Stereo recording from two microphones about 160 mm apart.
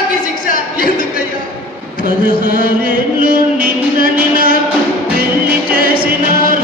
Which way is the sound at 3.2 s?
60° right (ahead or behind).